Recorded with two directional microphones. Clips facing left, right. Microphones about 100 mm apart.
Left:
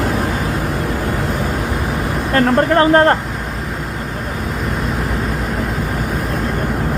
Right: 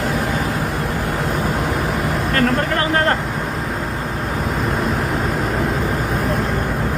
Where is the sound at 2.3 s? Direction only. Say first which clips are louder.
Left 7 dB; 30° left (ahead or behind).